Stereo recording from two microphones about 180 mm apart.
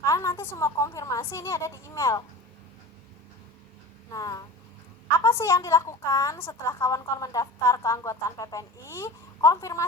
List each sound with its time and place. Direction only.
0.0 s a woman's voice: 20° left (ahead or behind)
4.1 s a woman's voice: 20° left (ahead or behind)